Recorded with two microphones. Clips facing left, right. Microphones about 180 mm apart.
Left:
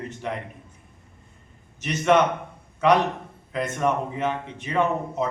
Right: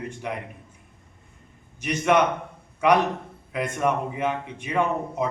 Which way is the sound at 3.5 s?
10° right (ahead or behind).